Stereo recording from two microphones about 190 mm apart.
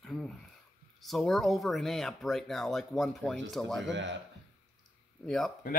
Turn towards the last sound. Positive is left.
turn(degrees=0)  # may be behind; listen again after turning